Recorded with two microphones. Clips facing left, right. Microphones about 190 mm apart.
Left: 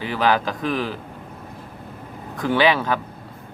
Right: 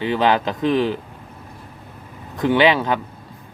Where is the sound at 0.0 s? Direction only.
20° right (ahead or behind).